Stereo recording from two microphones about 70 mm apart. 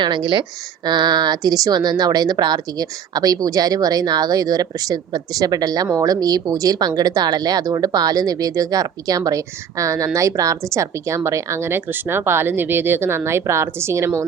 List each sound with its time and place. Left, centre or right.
0.9 s a woman's voice: right